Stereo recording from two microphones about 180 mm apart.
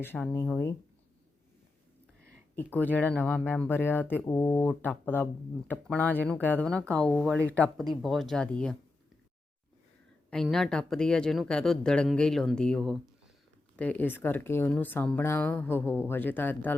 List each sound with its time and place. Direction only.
0.0 s speech: 10° left (ahead or behind)
2.6 s speech: 10° left (ahead or behind)
10.2 s speech: centre (ahead or behind)